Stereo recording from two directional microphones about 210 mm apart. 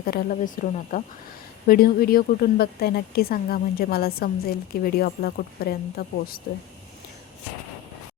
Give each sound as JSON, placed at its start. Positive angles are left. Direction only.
{"t": 0.0, "sound": "a woman's voice", "side_deg": 40}